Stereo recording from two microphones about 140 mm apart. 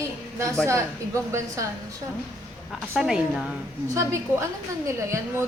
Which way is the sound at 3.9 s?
20° right (ahead or behind).